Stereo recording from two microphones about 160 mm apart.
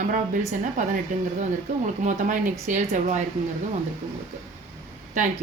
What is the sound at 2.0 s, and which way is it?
Speech, 50° right (ahead or behind).